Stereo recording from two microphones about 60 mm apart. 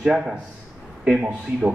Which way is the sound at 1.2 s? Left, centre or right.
Centre.